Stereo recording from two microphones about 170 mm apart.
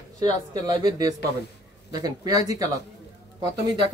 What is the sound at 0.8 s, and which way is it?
A man's voice, 25° right (ahead or behind).